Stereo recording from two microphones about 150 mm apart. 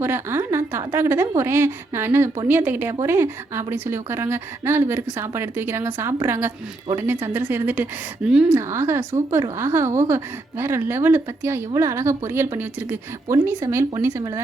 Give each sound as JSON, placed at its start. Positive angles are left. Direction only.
{"t": 0.0, "sound": "a woman's voice", "side_deg": -15}
{"t": 8.5, "sound": "a woman's voice", "side_deg": -15}